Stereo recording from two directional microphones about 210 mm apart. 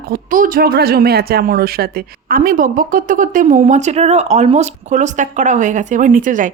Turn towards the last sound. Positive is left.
turn(degrees=-40)  # may be behind; listen again after turning